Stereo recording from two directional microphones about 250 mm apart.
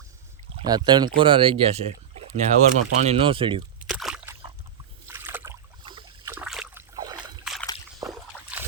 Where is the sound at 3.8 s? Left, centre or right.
Centre.